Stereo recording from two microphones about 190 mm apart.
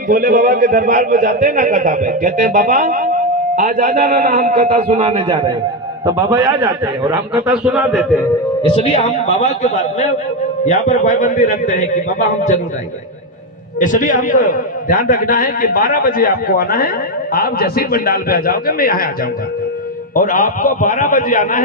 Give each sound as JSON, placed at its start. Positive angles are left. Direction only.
{"t": 0.1, "sound": "a man's voice", "side_deg": -45}
{"t": 6.3, "sound": "a man's voice", "side_deg": -10}
{"t": 8.7, "sound": "a man's voice", "side_deg": 30}
{"t": 10.7, "sound": "a man's voice", "side_deg": 40}
{"t": 13.7, "sound": "a man's voice", "side_deg": 45}
{"t": 20.1, "sound": "a man's voice", "side_deg": 45}